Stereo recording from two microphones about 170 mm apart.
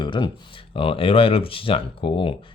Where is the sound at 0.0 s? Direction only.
30° left (ahead or behind).